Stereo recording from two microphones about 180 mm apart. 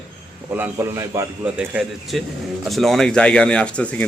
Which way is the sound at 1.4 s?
5° right (ahead or behind).